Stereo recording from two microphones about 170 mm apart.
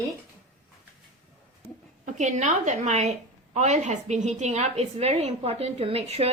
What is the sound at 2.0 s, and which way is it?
A woman's voice, 45° right (ahead or behind).